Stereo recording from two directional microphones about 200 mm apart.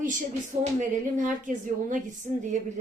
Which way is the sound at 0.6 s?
40° right (ahead or behind).